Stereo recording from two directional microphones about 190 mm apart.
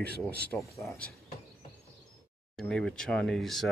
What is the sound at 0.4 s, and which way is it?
Speech, 10° left (ahead or behind).